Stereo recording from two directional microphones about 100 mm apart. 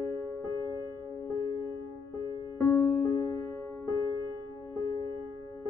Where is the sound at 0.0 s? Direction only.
35° left (ahead or behind).